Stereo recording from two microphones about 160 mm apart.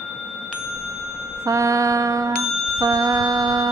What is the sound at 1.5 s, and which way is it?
A woman's voice, 20° right (ahead or behind).